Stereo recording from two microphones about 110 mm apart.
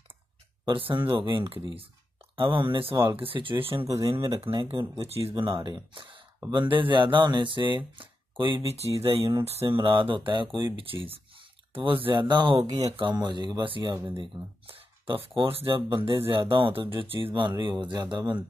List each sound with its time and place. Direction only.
0.7 s speech: 50° right (ahead or behind)
4.5 s speech: 20° right (ahead or behind)
5.2 s speech: 45° right (ahead or behind)
8.6 s speech: 65° right (ahead or behind)
9.8 s speech: 50° right (ahead or behind)